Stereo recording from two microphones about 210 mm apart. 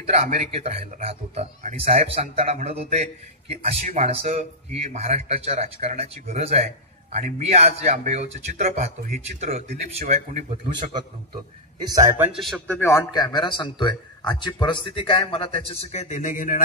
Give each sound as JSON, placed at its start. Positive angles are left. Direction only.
{"t": 0.0, "sound": "speech", "side_deg": -30}
{"t": 12.4, "sound": "a man's voice", "side_deg": 5}